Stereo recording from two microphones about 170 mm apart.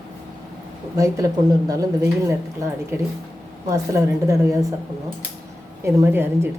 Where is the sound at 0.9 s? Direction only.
20° right (ahead or behind).